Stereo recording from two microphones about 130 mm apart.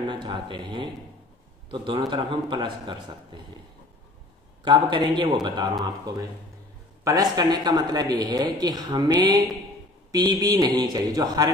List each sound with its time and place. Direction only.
0.1 s speech: 35° right (ahead or behind)
4.7 s speech: 40° right (ahead or behind)
7.1 s speech: 30° right (ahead or behind)